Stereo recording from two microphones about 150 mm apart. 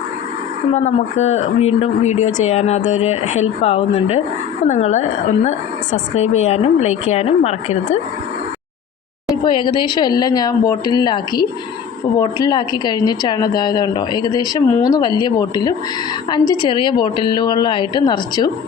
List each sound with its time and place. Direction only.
0.7 s speech: 50° left (ahead or behind)
9.4 s a woman's voice: 30° left (ahead or behind)